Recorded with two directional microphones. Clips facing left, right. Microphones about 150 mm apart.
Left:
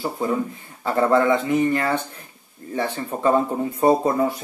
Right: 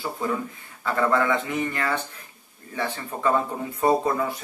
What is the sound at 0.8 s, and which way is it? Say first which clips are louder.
Speech: left 5 dB; 30° left (ahead or behind).